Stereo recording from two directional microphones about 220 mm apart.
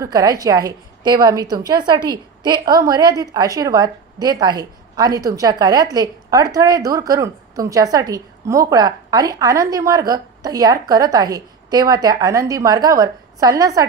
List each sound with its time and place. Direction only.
0.0 s a woman's voice: 15° right (ahead or behind)